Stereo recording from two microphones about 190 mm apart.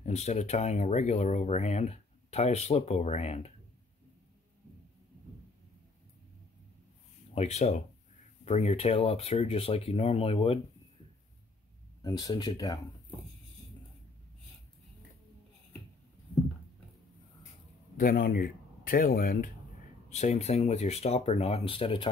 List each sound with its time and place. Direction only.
0.0 s speech: 35° left (ahead or behind)
7.3 s speech: 35° left (ahead or behind)
12.0 s speech: 20° left (ahead or behind)
17.9 s speech: 50° left (ahead or behind)
20.1 s speech: 35° left (ahead or behind)